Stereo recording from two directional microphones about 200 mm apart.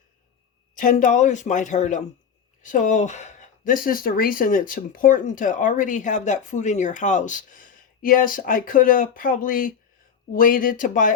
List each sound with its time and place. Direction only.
0.8 s speech: 40° left (ahead or behind)